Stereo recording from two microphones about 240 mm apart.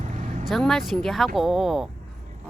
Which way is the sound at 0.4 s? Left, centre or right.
Centre.